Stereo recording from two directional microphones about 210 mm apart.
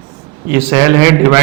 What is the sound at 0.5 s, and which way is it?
Speech, 10° right (ahead or behind).